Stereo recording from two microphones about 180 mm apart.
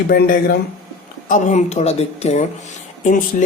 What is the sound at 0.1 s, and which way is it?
Speech, 55° left (ahead or behind).